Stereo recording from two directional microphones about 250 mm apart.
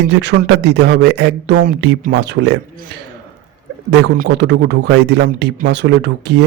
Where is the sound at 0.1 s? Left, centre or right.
Right.